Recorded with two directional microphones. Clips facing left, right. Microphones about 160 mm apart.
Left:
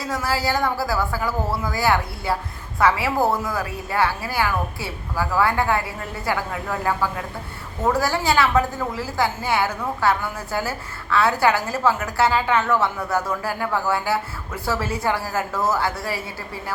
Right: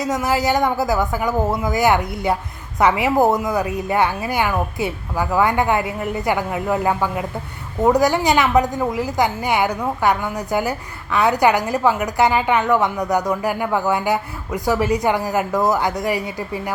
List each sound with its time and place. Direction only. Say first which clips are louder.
0.0 s a woman's voice: right 5 dB; 20° right (ahead or behind)